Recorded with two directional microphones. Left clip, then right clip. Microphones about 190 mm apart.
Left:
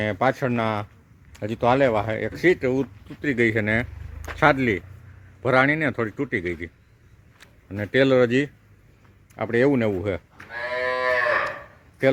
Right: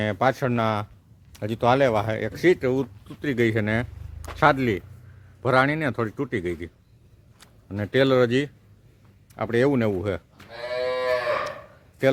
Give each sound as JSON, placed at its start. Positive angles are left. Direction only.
{"t": 0.0, "sound": "speech", "side_deg": 0}
{"t": 7.7, "sound": "speech", "side_deg": -5}
{"t": 10.3, "sound": "livestock", "side_deg": -40}